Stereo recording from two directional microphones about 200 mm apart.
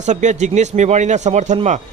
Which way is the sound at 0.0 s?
35° right (ahead or behind).